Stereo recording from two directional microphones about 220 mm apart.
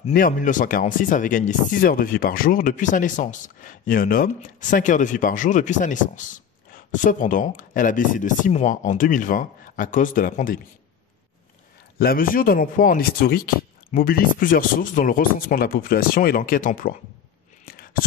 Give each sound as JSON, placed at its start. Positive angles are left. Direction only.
{"t": 0.0, "sound": "speech", "side_deg": 40}
{"t": 12.0, "sound": "speech", "side_deg": 40}